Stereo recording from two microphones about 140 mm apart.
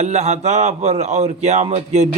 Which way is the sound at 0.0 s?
50° right (ahead or behind).